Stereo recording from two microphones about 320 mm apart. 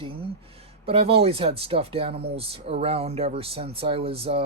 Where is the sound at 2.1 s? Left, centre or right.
Right.